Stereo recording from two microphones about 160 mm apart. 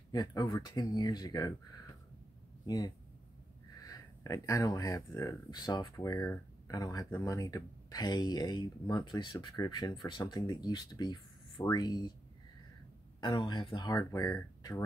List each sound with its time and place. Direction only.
0.1 s speech: 25° left (ahead or behind)
2.6 s speech: 25° left (ahead or behind)
13.2 s speech: 30° left (ahead or behind)